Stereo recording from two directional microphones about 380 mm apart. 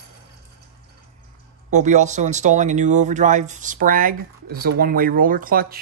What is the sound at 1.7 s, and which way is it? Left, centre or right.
Speech, centre.